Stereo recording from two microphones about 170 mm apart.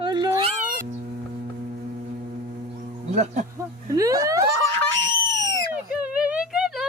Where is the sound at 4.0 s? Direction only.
20° right (ahead or behind).